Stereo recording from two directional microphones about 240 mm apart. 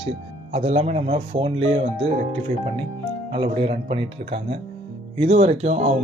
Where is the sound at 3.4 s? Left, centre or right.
Right.